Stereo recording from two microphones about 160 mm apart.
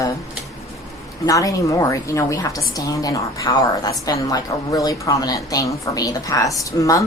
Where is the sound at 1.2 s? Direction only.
20° left (ahead or behind).